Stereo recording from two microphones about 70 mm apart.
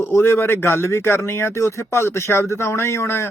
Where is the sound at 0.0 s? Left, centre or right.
Left.